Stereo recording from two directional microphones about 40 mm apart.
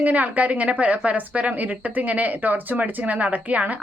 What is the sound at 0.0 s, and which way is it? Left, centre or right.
A woman's voice, right.